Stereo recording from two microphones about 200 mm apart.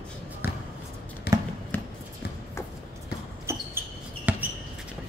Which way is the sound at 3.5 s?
10° right (ahead or behind).